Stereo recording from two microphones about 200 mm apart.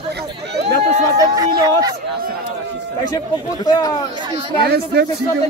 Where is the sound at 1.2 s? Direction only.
20° right (ahead or behind).